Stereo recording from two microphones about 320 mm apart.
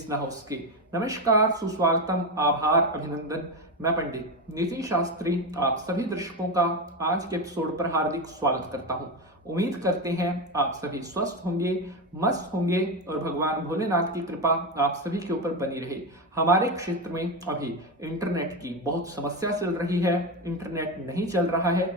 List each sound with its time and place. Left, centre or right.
0.9 s speech: centre